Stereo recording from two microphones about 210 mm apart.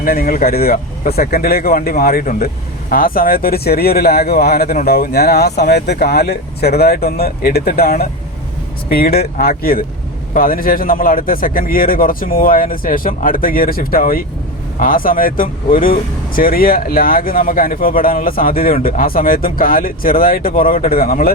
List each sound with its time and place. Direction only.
0.0 s speech: 45° left (ahead or behind)